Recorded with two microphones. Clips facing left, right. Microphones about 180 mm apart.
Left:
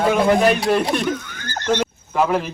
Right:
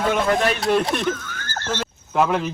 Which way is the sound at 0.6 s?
Centre (ahead or behind).